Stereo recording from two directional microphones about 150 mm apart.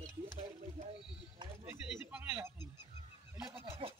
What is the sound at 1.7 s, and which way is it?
Speech, 15° right (ahead or behind).